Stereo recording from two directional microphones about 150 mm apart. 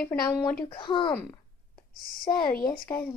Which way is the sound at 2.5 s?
85° left.